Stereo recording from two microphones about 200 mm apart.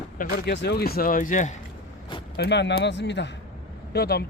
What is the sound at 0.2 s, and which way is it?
Speech, 50° left (ahead or behind).